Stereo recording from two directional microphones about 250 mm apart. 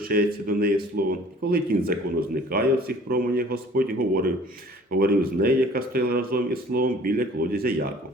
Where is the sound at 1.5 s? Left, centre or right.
Right.